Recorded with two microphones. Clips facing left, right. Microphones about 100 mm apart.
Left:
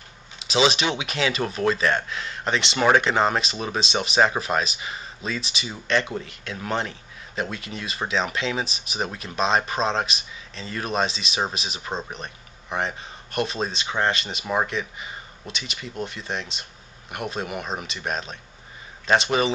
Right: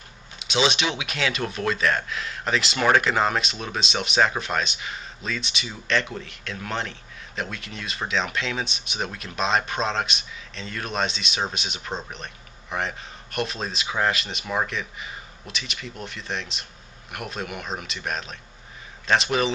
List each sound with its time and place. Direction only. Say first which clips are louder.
0.4 s speech: left 2 dB; centre (ahead or behind)